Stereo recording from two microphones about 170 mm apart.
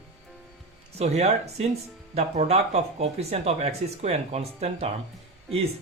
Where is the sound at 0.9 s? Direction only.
40° right (ahead or behind).